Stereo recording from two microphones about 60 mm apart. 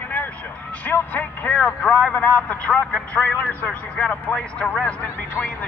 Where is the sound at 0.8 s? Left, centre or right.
Left.